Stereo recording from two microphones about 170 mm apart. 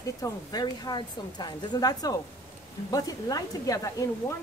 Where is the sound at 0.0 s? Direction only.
20° left (ahead or behind).